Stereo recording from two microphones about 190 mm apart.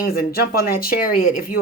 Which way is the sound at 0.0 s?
50° left (ahead or behind).